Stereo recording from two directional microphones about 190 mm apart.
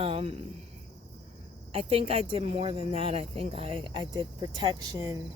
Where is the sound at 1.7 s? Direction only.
30° right (ahead or behind).